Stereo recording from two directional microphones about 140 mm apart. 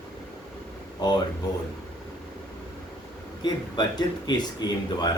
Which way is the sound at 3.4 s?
30° left (ahead or behind).